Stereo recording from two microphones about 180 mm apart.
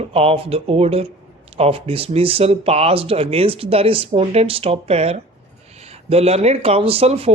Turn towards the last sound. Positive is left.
turn(degrees=-35)  # may be behind; listen again after turning